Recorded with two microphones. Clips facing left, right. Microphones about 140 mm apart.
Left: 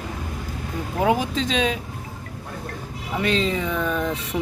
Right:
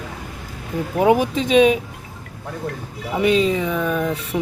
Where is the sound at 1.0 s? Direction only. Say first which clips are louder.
Right 5 dB; 15° right (ahead or behind).